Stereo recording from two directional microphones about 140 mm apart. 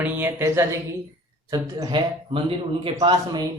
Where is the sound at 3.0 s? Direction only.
30° right (ahead or behind).